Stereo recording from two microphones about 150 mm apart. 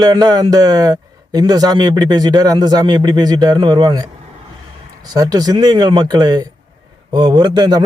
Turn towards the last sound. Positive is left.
turn(degrees=-30)  # may be behind; listen again after turning